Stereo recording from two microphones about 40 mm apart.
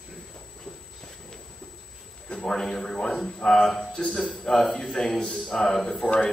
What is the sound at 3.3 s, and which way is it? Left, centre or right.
Speech, centre.